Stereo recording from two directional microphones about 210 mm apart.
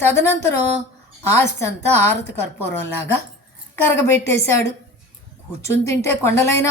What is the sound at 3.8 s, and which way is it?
A woman's voice, 10° left (ahead or behind).